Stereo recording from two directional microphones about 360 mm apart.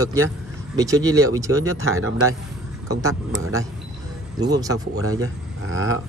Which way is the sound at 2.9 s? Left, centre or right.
Centre.